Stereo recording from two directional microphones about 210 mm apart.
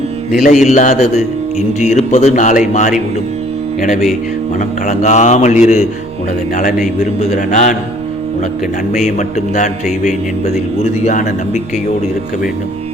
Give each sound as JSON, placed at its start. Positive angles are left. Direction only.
{"t": 0.4, "sound": "speech", "side_deg": 35}
{"t": 8.9, "sound": "speech", "side_deg": 35}